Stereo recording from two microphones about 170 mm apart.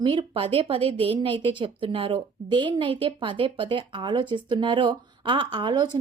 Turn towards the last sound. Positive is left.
turn(degrees=-25)  # may be behind; listen again after turning